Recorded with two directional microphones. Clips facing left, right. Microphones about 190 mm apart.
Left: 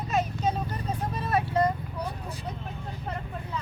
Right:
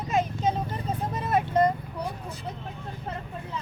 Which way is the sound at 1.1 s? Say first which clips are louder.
Right 2 dB; 20° right (ahead or behind).